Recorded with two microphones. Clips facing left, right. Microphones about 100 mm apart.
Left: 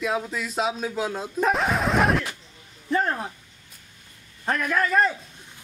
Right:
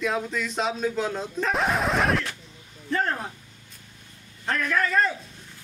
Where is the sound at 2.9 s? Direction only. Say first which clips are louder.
Left 2 dB; 15° left (ahead or behind).